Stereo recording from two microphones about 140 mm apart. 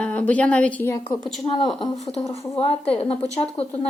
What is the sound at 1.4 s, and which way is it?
Speech, 40° left (ahead or behind).